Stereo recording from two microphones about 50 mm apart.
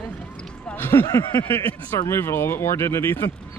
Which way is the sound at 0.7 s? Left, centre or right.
Left.